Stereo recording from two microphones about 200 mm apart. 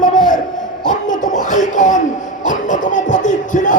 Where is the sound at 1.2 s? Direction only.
40° left (ahead or behind).